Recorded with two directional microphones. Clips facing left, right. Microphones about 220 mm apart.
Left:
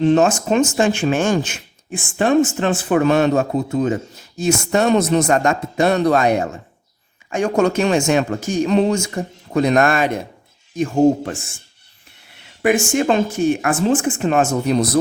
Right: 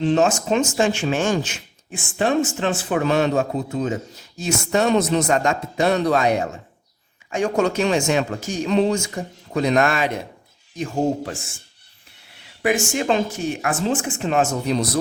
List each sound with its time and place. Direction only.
0.0 s speech: 50° left (ahead or behind)
12.6 s speech: 50° left (ahead or behind)